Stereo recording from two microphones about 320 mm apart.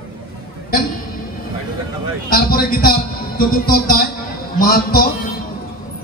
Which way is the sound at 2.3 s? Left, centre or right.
Left.